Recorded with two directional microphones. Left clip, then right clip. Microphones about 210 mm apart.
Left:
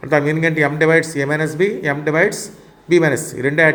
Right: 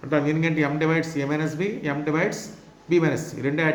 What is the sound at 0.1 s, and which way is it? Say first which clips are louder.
A man's voice: left 7 dB; 40° left (ahead or behind).